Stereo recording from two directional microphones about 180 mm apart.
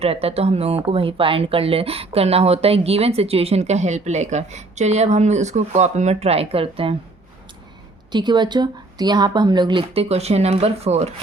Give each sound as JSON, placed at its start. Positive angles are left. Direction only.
{"t": 0.0, "sound": "speech", "side_deg": -35}
{"t": 8.1, "sound": "speech", "side_deg": -25}